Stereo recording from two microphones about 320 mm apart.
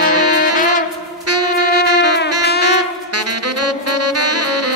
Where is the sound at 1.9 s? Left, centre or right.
Right.